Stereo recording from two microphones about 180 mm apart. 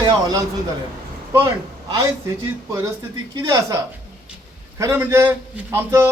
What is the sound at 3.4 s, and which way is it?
A man's voice, 20° right (ahead or behind).